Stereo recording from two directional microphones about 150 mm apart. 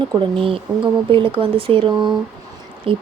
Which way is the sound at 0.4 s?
35° right (ahead or behind).